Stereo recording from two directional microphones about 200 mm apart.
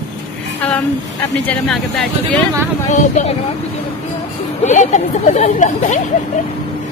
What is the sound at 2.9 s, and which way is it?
Speech, 35° left (ahead or behind).